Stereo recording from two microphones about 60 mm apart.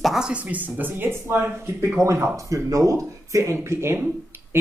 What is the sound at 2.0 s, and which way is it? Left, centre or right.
Speech, right.